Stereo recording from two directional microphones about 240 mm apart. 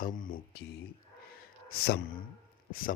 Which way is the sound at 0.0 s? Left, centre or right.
Left.